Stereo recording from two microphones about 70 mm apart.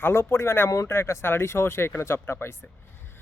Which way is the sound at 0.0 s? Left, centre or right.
Left.